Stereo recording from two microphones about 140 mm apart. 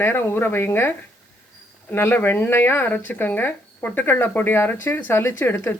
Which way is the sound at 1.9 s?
15° left (ahead or behind).